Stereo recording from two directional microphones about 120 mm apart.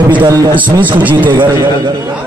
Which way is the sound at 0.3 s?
30° right (ahead or behind).